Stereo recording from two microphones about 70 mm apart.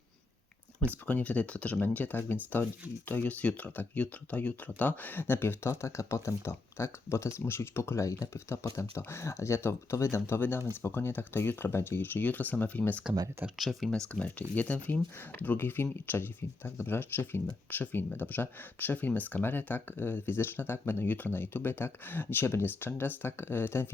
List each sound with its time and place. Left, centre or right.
1.0 s speech: left
13.1 s speech: centre
13.6 s speech: centre
14.1 s speech: centre